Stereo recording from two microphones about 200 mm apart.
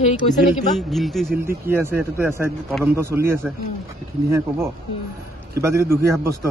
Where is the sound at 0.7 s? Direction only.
Centre (ahead or behind).